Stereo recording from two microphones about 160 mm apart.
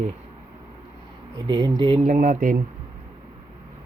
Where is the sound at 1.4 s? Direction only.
30° right (ahead or behind).